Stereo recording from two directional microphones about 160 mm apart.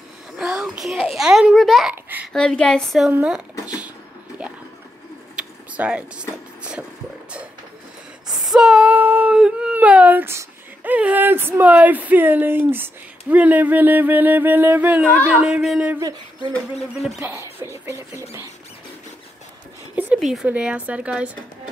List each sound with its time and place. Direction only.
0.4 s a child's voice: 5° right (ahead or behind)
5.3 s vehicle: 5° right (ahead or behind)
8.3 s a sound: centre (ahead or behind)
13.3 s speech: 10° right (ahead or behind)
16.0 s speech: 25° right (ahead or behind)
20.2 s speech: centre (ahead or behind)